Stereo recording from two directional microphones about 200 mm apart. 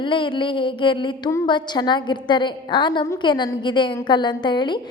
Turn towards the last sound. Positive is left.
turn(degrees=20)  # may be behind; listen again after turning